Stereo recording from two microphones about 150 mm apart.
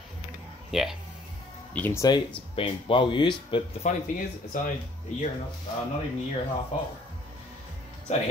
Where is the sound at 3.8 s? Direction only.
60° left (ahead or behind).